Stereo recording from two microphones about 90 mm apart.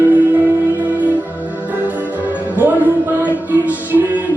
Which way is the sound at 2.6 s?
20° right (ahead or behind).